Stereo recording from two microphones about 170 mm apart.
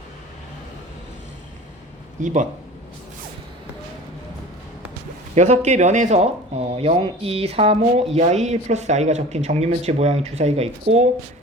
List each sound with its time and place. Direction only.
2.2 s speech: 50° right (ahead or behind)
5.3 s speech: 45° right (ahead or behind)